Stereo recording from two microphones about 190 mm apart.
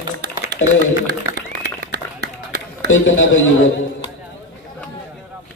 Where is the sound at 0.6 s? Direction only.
90° left.